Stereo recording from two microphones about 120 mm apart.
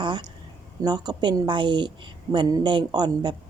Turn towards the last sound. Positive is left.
turn(degrees=-35)  # may be behind; listen again after turning